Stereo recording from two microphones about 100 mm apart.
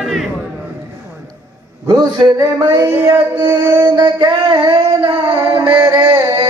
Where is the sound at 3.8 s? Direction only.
45° right (ahead or behind).